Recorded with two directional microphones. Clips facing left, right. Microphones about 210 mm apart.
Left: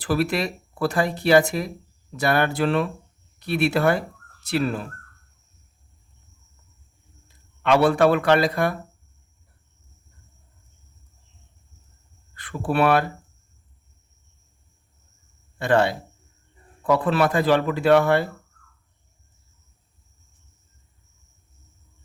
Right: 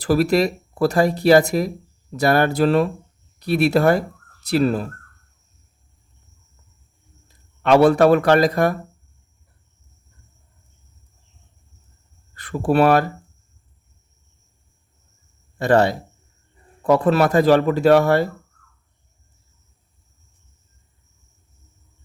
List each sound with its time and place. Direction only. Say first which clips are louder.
0.0 s speech: right 6 dB; 40° right (ahead or behind)
7.3 s speech: right 4 dB; 40° right (ahead or behind)
12.3 s speech: right 6 dB; 40° right (ahead or behind)
15.5 s speech: right 4 dB; 40° right (ahead or behind)